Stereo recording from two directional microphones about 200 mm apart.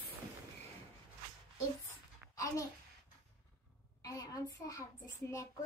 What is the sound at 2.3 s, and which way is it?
Speech, 15° left (ahead or behind).